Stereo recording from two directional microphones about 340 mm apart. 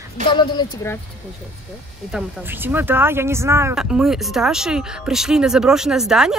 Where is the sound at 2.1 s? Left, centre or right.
Centre.